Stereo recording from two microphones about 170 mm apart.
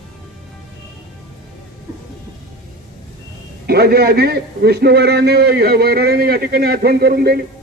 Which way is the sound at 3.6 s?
70° right (ahead or behind).